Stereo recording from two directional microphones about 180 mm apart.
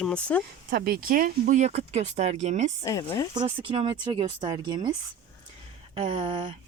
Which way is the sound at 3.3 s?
25° right (ahead or behind).